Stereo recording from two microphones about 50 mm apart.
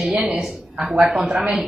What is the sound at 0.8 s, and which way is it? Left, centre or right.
Speech, right.